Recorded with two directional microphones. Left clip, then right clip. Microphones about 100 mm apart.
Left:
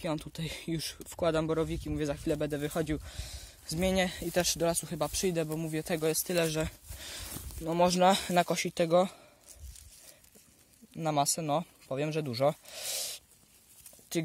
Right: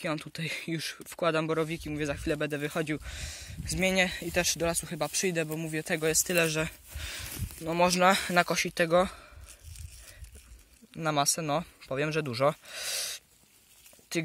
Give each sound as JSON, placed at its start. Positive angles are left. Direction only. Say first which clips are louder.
{"t": 0.0, "sound": "speech", "louder": "right 2 dB", "side_deg": 20}
{"t": 3.6, "sound": "speech", "louder": "right 3 dB", "side_deg": 20}
{"t": 6.0, "sound": "speech", "louder": "right 4 dB", "side_deg": 0}
{"t": 6.6, "sound": "speech", "louder": "right 2 dB", "side_deg": 10}
{"t": 10.9, "sound": "speech", "louder": "right 2 dB", "side_deg": 5}